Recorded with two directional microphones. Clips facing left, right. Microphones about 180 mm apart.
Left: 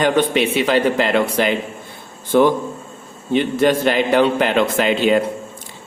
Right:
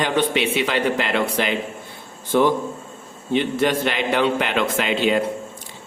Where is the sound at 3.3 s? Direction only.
40° left (ahead or behind).